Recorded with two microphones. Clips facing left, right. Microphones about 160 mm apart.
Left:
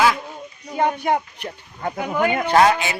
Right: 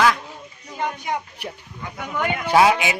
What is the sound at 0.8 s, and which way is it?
Speech, 55° left (ahead or behind).